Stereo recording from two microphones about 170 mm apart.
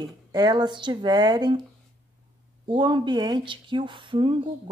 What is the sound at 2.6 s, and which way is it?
Speech, 25° right (ahead or behind).